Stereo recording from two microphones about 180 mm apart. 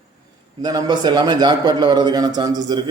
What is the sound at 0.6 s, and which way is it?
A man's voice, 25° right (ahead or behind).